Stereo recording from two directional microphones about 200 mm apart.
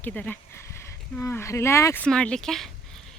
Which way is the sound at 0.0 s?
10° left (ahead or behind).